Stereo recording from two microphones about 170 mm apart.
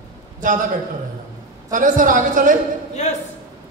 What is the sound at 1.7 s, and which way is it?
Speech, 50° right (ahead or behind).